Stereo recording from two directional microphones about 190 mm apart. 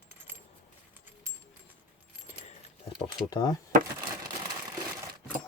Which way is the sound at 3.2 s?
20° left (ahead or behind).